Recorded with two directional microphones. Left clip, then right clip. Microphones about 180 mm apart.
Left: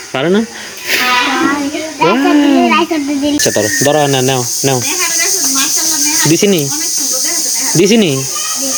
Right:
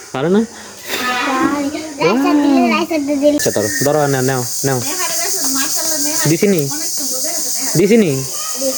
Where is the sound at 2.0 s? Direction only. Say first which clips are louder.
Left 4 dB; 5° right (ahead or behind).